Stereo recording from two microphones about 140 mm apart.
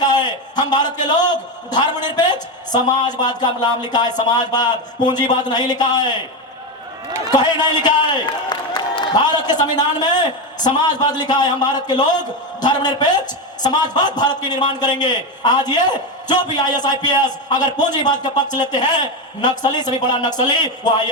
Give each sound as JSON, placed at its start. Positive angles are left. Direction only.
{"t": 0.0, "sound": "a man's voice", "side_deg": 30}
{"t": 7.3, "sound": "a man's voice", "side_deg": 30}